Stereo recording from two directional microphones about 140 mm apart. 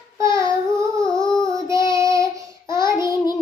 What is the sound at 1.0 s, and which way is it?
Female singing, 5° left (ahead or behind).